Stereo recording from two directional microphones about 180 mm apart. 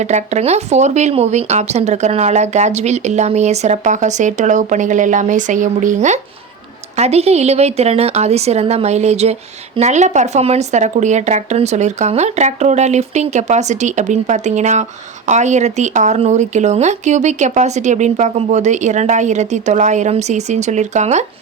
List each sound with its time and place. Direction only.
0.0 s speech: 40° right (ahead or behind)